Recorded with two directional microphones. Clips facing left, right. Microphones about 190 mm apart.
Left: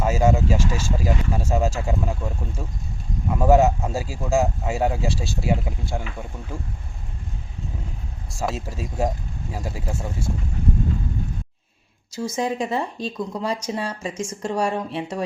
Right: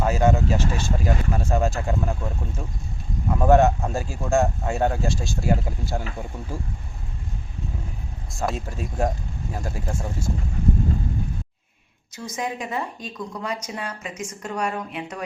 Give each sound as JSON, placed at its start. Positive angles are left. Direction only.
{"t": 0.0, "sound": "a man's voice", "side_deg": 10}
{"t": 8.4, "sound": "a man's voice", "side_deg": 5}
{"t": 12.1, "sound": "speech", "side_deg": 30}